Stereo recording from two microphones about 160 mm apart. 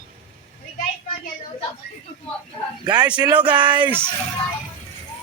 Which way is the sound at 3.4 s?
30° right (ahead or behind).